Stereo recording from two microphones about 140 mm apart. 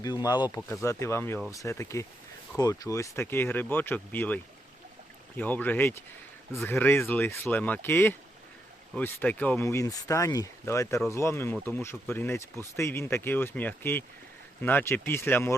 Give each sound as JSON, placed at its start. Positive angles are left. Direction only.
{"t": 0.0, "sound": "speech", "side_deg": 25}
{"t": 5.4, "sound": "speech", "side_deg": 10}
{"t": 9.6, "sound": "speech", "side_deg": 20}